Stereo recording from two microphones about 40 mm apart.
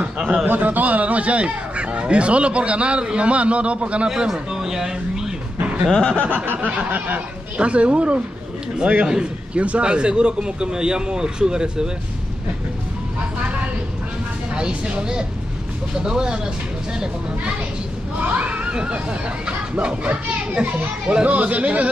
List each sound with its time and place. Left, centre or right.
0.5 s speech: right
4.1 s speech: centre
5.9 s a sound: centre
6.1 s a sound: right
6.8 s speech: right; by 11.9 s centre
14.5 s speech: right
18.2 s speech: right